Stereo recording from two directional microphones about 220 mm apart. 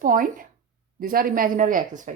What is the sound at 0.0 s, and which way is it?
A woman's voice, 40° right (ahead or behind).